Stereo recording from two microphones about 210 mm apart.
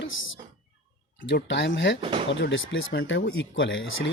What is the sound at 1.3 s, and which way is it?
Speech, 55° left (ahead or behind).